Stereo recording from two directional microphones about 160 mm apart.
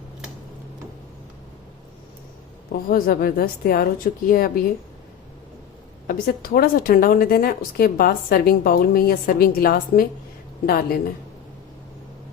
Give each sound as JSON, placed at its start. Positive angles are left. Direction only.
{"t": 2.7, "sound": "a woman's voice", "side_deg": 70}
{"t": 6.1, "sound": "a woman's voice", "side_deg": 60}